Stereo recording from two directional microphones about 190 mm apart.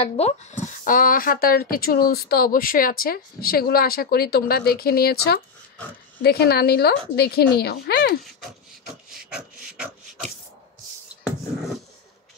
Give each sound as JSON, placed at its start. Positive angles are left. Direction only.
{"t": 0.0, "sound": "speech", "side_deg": 35}
{"t": 8.4, "sound": "beatboxing", "side_deg": 0}